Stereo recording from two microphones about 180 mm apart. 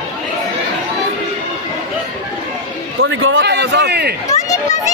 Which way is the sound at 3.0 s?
90° right.